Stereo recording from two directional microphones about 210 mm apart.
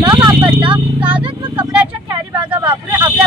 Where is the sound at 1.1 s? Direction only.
25° right (ahead or behind).